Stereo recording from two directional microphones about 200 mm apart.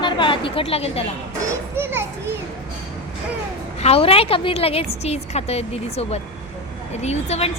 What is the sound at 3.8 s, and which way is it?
A woman's voice, 30° left (ahead or behind).